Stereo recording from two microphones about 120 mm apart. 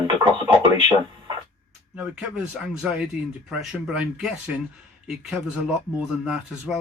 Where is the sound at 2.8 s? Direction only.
5° right (ahead or behind).